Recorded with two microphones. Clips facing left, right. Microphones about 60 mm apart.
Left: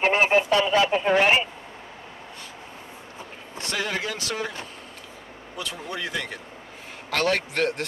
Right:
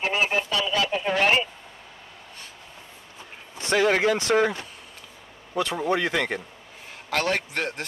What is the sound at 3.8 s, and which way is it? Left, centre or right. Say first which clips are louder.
Speech: right 11 dB; right.